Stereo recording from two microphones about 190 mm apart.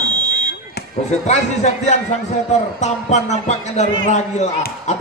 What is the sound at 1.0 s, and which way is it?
Speech, 35° left (ahead or behind).